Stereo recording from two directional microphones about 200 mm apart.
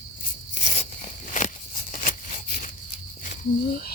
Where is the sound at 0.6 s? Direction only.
35° left (ahead or behind).